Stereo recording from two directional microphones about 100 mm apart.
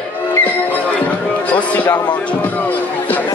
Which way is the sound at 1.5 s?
15° left (ahead or behind).